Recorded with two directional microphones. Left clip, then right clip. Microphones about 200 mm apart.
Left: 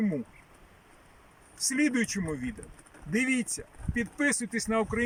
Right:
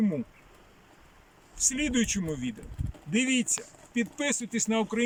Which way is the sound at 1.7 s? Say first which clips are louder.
Left 1 dB; 5° right (ahead or behind).